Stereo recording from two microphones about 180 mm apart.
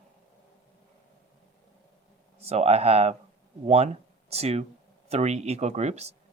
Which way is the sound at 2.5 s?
35° right (ahead or behind).